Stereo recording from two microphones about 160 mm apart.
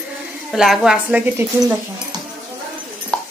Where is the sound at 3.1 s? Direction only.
5° left (ahead or behind).